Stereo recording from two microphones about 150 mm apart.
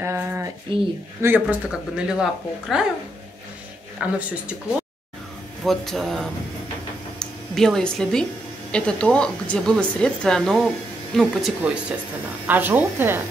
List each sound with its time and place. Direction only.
0.0 s speech: 20° right (ahead or behind)
0.7 s speech: 35° right (ahead or behind)
1.2 s speech: 10° right (ahead or behind)
4.0 s speech: 10° right (ahead or behind)
5.7 s speech: centre (ahead or behind); by 13.2 s 15° right (ahead or behind)